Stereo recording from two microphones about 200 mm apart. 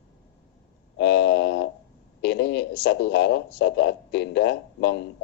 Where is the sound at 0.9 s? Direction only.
60° left (ahead or behind).